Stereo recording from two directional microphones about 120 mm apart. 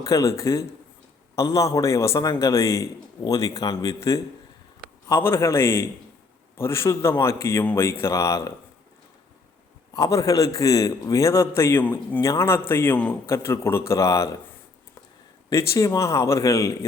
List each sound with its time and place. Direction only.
0.0 s a man's voice: 25° left (ahead or behind)
9.9 s a man's voice: 30° left (ahead or behind)
15.4 s a man's voice: 25° left (ahead or behind)